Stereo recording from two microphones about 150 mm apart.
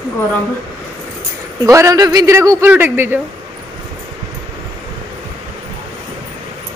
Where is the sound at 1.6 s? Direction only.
20° right (ahead or behind).